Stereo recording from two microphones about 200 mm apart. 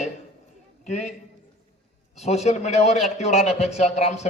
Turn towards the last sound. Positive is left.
turn(degrees=35)  # may be behind; listen again after turning